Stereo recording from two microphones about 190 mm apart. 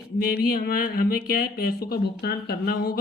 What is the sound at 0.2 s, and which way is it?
Speech, 50° left (ahead or behind).